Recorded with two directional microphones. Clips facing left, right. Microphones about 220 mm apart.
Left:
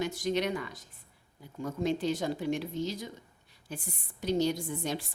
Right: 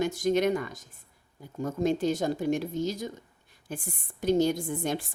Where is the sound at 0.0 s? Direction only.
45° right (ahead or behind).